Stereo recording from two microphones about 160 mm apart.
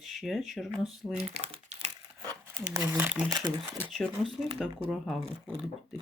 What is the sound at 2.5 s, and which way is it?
Speech, 15° right (ahead or behind).